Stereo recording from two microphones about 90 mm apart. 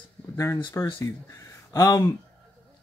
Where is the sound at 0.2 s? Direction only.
15° left (ahead or behind).